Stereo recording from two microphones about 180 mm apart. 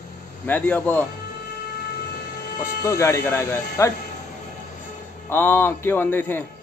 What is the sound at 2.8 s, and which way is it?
A man's voice, 15° left (ahead or behind).